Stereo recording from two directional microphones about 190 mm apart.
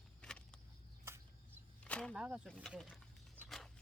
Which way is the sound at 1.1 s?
15° right (ahead or behind).